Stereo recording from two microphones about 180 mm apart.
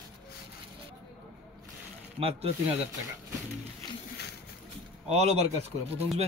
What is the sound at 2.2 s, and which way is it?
Speech, 35° right (ahead or behind).